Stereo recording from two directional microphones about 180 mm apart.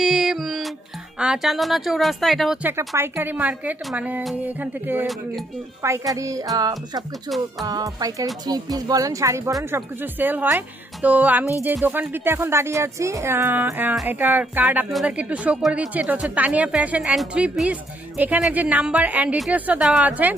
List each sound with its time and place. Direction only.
0.0 s music: centre (ahead or behind)
1.2 s speech: 5° right (ahead or behind)
2.6 s speech: 15° right (ahead or behind)
6.1 s music: 20° right (ahead or behind)
8.4 s speech: 20° right (ahead or behind)